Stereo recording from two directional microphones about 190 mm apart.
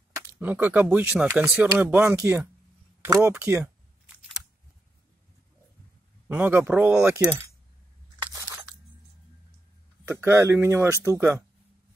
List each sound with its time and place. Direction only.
0.4 s speech: 10° right (ahead or behind)
3.2 s a sound: 5° right (ahead or behind)
6.2 s speech: 10° right (ahead or behind)
10.0 s speech: 10° right (ahead or behind)